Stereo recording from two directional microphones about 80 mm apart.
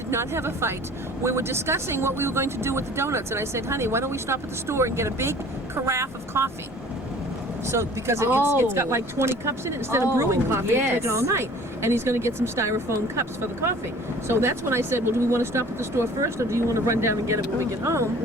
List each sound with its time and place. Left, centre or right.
0.1 s speech: right
7.7 s speech: right